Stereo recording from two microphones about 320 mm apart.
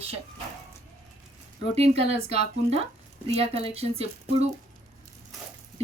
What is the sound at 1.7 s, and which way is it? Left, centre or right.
Speech, centre.